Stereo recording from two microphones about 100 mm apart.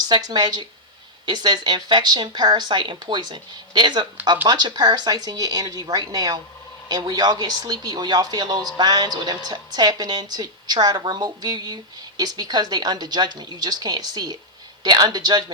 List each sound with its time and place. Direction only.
0.1 s speech: 45° right (ahead or behind)